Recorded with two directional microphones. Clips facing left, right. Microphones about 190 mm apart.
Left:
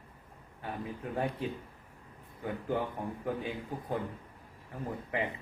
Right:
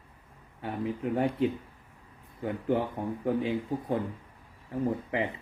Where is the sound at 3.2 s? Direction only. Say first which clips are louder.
Right 8 dB; 25° right (ahead or behind).